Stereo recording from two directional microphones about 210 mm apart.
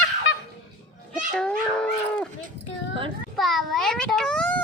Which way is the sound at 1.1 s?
5° left (ahead or behind).